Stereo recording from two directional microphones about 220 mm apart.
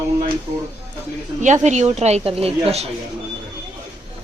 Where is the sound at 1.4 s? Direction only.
35° right (ahead or behind).